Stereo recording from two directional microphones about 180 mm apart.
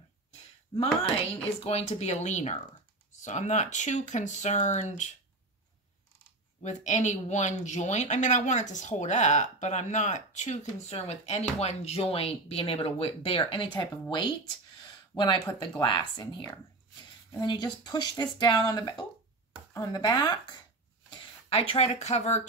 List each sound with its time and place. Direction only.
0.7 s speech: 30° left (ahead or behind)
6.6 s speech: 40° left (ahead or behind); by 20.3 s 25° left (ahead or behind)
21.5 s speech: 35° left (ahead or behind)